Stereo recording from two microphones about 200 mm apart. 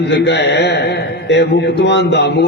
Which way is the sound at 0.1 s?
60° left (ahead or behind).